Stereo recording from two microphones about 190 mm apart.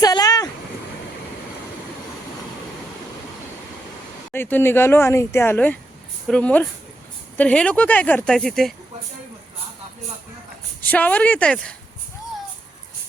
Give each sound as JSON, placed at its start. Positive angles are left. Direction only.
{"t": 0.0, "sound": "vehicle", "side_deg": 20}
{"t": 4.3, "sound": "speech", "side_deg": 10}
{"t": 10.8, "sound": "speech", "side_deg": 10}